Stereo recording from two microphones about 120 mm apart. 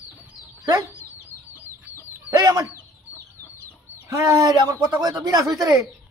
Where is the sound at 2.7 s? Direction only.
20° left (ahead or behind).